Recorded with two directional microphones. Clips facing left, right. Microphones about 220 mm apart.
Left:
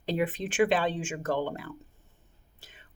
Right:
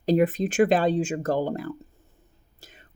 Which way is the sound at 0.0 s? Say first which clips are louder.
Right 8 dB; 40° right (ahead or behind).